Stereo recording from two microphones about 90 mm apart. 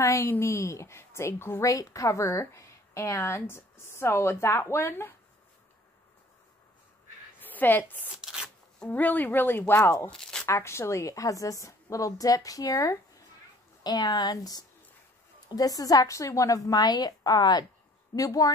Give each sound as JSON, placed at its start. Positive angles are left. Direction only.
{"t": 0.0, "sound": "a woman's voice", "side_deg": 35}
{"t": 1.6, "sound": "a woman's voice", "side_deg": 40}
{"t": 7.3, "sound": "a woman's voice", "side_deg": 20}
{"t": 8.1, "sound": "a sound", "side_deg": -5}
{"t": 8.9, "sound": "speech", "side_deg": 20}
{"t": 10.1, "sound": "a sound", "side_deg": 5}
{"t": 10.4, "sound": "a woman's voice", "side_deg": 30}
{"t": 13.8, "sound": "a woman's voice", "side_deg": 50}